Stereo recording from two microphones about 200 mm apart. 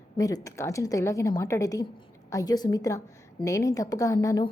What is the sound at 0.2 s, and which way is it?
A woman's voice, 15° left (ahead or behind).